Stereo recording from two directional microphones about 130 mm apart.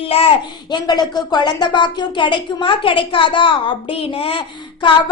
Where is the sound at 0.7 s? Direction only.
35° left (ahead or behind).